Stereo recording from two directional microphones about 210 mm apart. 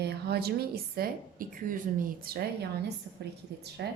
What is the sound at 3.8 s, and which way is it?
Speech, 50° right (ahead or behind).